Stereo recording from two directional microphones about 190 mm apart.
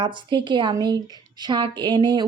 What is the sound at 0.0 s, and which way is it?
Speech, 25° right (ahead or behind).